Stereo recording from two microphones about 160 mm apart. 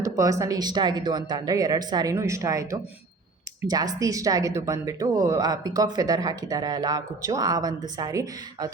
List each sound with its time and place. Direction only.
0.0 s speech: 20° right (ahead or behind)